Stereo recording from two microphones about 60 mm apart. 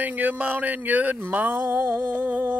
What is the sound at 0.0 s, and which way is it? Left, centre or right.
Speech, right.